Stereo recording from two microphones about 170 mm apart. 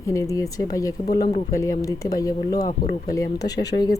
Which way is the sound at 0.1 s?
20° left (ahead or behind).